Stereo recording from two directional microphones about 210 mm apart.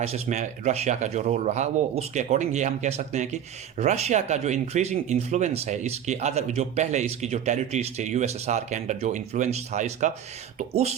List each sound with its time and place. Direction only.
0.0 s speech: 30° right (ahead or behind)